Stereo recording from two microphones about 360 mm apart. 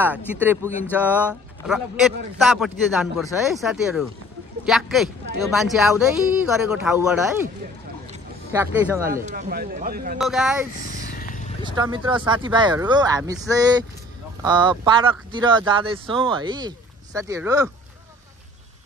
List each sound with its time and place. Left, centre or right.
0.3 s speech: centre
8.5 s speech: centre
9.1 s speech: right
10.1 s speech: centre
11.1 s a sound: left
11.6 s speech: centre